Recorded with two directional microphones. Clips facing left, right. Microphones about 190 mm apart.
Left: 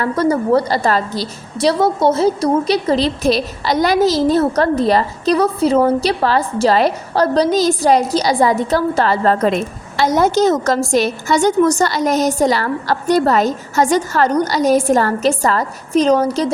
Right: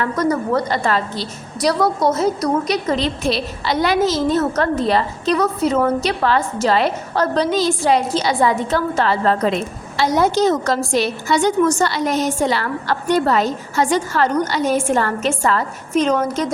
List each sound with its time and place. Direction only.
0.0 s a woman's voice: 30° left (ahead or behind)
1.6 s a woman's voice: 25° left (ahead or behind)